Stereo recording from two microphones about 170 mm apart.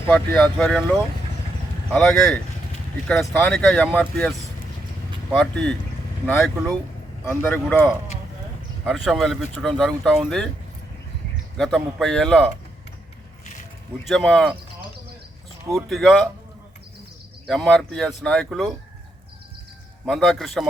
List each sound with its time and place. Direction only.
0.1 s speech: 5° left (ahead or behind)
1.9 s speech: 5° left (ahead or behind)
5.3 s speech: 5° left (ahead or behind)
9.0 s speech: centre (ahead or behind)
11.5 s speech: 5° left (ahead or behind)
13.4 s keys jangling: 45° left (ahead or behind)
14.0 s speech: centre (ahead or behind)
15.7 s speech: centre (ahead or behind)
17.4 s speech: centre (ahead or behind)
20.1 s speech: 5° left (ahead or behind)